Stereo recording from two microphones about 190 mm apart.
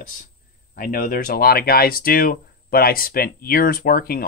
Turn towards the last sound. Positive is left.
turn(degrees=50)  # may be behind; listen again after turning